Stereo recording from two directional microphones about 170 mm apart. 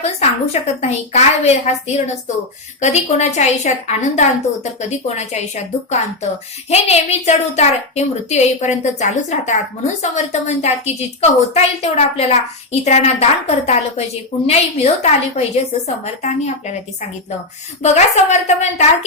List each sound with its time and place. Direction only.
0.0 s a woman's voice: 40° left (ahead or behind)
2.8 s a woman's voice: 40° left (ahead or behind)
17.8 s a woman's voice: 45° left (ahead or behind)